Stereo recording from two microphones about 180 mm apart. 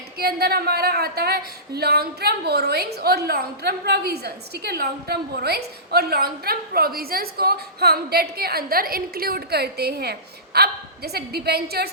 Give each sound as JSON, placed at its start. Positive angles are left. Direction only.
{"t": 0.2, "sound": "a woman's voice", "side_deg": -60}